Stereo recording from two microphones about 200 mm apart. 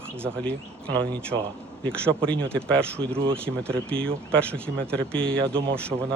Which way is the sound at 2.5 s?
5° left (ahead or behind).